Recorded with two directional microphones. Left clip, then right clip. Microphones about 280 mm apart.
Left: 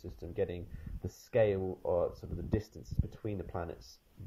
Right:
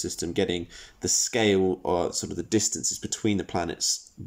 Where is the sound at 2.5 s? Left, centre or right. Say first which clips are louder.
Right 13 dB; centre.